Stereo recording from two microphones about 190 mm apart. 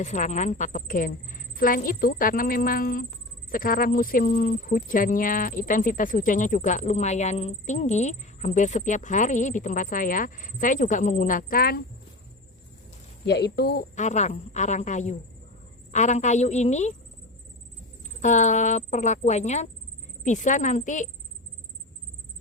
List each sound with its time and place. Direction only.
0.0 s speech: 40° left (ahead or behind)
13.2 s speech: 65° left (ahead or behind)
13.9 s speech: 40° left (ahead or behind)
18.0 s speech: 40° left (ahead or behind)